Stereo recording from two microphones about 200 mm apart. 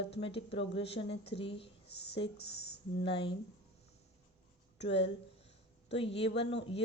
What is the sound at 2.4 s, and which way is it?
Speech, 55° left (ahead or behind).